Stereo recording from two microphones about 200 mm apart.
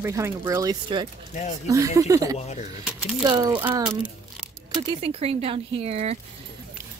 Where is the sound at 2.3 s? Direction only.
35° left (ahead or behind).